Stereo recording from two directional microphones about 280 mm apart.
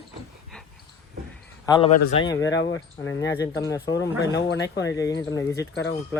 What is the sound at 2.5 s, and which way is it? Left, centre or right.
Speech, left.